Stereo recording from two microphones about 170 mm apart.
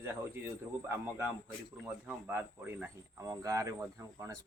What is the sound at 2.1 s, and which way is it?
Speech, 15° right (ahead or behind).